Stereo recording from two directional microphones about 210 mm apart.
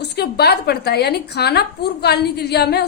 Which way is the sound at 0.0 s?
50° left (ahead or behind).